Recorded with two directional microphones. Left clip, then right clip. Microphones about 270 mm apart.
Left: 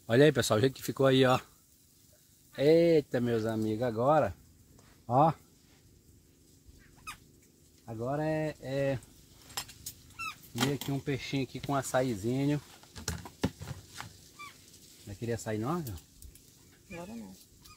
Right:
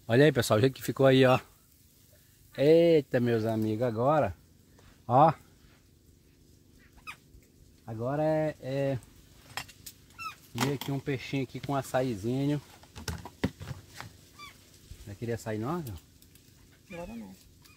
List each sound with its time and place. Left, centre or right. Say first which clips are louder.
0.0 s speech: right 1 dB; centre
2.5 s speech: right 2 dB; right
7.8 s speech: right 4 dB; right
10.5 s a sound: right 1 dB; centre
15.0 s speech: right 1 dB; centre
16.9 s speech: right 2 dB; right